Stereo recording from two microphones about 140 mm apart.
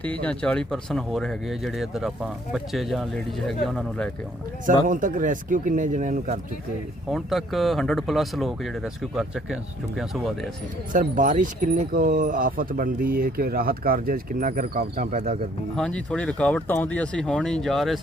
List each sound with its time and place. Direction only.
0.0 s speech: 10° left (ahead or behind)
4.6 s speech: 70° right (ahead or behind)
7.1 s speech: centre (ahead or behind)
10.9 s speech: 70° right (ahead or behind); by 15.1 s 90° right
15.1 s speech: 55° right (ahead or behind)
15.7 s speech: 5° left (ahead or behind)